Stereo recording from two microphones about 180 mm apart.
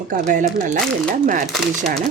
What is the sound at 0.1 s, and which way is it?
Speech, 45° right (ahead or behind).